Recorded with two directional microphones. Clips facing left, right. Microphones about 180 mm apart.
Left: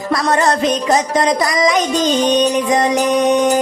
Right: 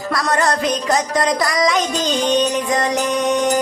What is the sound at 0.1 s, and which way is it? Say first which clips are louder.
Music: left 3 dB; 20° left (ahead or behind).